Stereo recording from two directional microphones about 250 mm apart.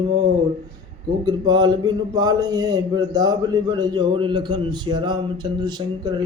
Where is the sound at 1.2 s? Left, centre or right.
Centre.